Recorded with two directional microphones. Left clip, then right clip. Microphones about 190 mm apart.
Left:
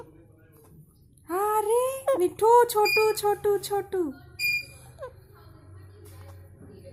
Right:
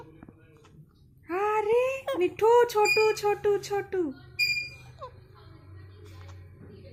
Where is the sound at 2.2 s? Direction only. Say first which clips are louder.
Left 1 dB; 10° left (ahead or behind).